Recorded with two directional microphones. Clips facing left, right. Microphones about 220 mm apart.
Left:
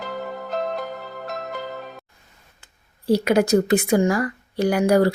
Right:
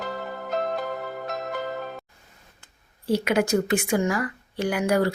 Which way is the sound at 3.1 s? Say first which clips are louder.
Left 5 dB; 35° left (ahead or behind).